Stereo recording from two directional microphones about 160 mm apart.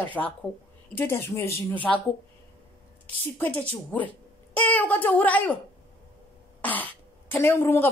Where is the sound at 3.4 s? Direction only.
10° left (ahead or behind).